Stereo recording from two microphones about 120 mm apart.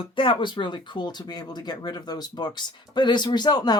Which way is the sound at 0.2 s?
45° left (ahead or behind).